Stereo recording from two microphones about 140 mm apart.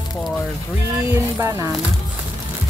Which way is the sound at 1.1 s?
20° right (ahead or behind).